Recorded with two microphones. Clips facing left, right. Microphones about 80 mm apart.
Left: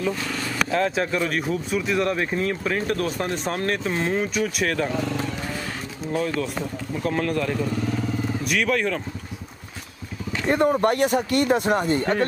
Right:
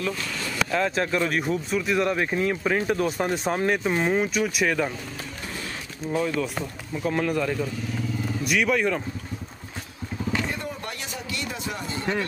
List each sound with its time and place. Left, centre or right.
0.7 s speech: centre
7.0 s speech: centre
10.5 s speech: left